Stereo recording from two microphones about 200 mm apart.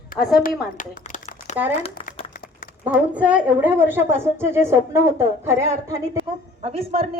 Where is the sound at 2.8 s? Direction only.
5° right (ahead or behind).